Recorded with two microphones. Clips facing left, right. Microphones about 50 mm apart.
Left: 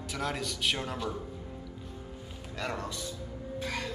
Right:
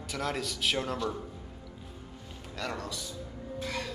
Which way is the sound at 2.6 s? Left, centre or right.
Centre.